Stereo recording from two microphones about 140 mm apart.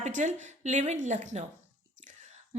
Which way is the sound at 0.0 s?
55° right (ahead or behind).